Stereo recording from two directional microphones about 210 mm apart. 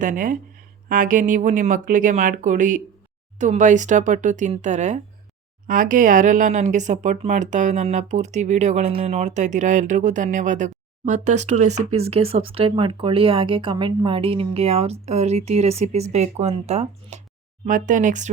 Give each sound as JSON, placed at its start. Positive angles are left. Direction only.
{"t": 0.0, "sound": "speech", "side_deg": -40}